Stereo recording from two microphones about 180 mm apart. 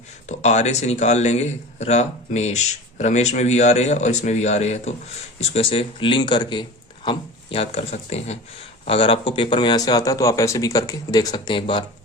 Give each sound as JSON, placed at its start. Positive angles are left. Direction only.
{"t": 0.3, "sound": "speech", "side_deg": 40}